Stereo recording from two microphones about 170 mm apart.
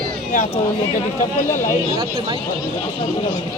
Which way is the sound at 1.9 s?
35° right (ahead or behind).